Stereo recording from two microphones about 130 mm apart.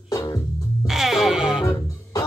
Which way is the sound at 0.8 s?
5° right (ahead or behind).